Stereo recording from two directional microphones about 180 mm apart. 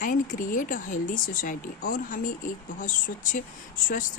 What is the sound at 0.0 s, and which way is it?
Speech, 50° left (ahead or behind).